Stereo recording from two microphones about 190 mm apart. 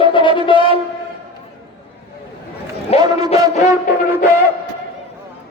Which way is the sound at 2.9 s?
30° left (ahead or behind).